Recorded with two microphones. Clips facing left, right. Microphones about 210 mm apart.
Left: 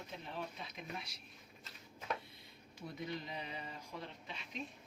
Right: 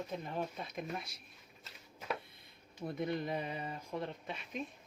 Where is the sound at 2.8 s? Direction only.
55° right (ahead or behind).